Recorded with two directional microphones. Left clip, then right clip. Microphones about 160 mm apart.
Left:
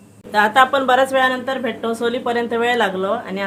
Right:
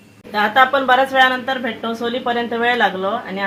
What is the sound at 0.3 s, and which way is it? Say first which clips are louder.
Speech: even; 25° left (ahead or behind).